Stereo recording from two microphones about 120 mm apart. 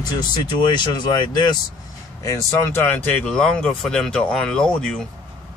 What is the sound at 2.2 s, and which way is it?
Speech, 25° left (ahead or behind).